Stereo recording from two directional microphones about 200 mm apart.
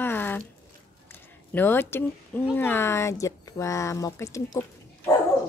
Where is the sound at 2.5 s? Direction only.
10° left (ahead or behind).